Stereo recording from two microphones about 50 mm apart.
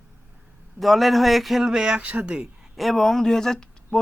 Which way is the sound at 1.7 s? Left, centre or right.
Centre.